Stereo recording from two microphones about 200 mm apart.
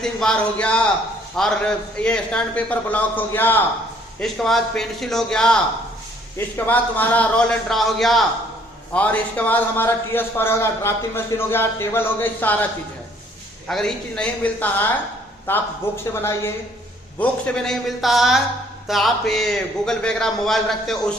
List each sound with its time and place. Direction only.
0.0 s a man's voice: 5° left (ahead or behind)
13.7 s a man's voice: centre (ahead or behind)